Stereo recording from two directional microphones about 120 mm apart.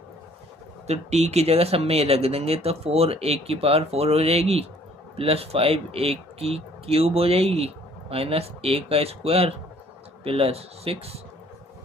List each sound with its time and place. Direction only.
0.9 s speech: 65° right (ahead or behind)